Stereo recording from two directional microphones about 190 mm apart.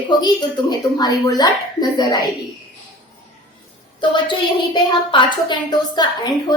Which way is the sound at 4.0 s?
25° left (ahead or behind).